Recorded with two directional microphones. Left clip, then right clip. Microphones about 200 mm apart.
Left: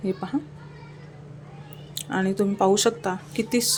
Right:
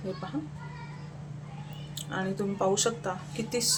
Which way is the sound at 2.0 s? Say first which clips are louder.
Left 8 dB; 45° left (ahead or behind).